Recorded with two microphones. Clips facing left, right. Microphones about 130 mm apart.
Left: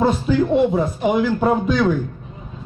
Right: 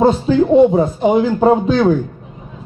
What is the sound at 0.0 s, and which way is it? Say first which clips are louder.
A man's voice: right 5 dB; 30° right (ahead or behind).